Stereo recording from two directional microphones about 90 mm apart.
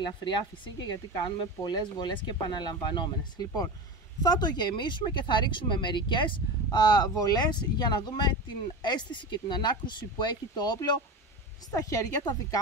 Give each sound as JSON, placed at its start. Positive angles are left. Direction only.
{"t": 0.0, "sound": "speech", "side_deg": 60}
{"t": 11.7, "sound": "a woman's voice", "side_deg": 40}